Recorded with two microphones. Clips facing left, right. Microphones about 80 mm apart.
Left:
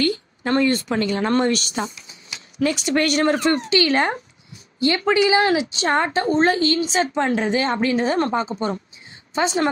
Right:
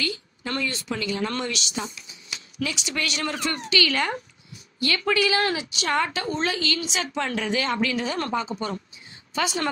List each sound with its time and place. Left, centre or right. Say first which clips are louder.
0.0 s a woman's voice: left 9 dB; left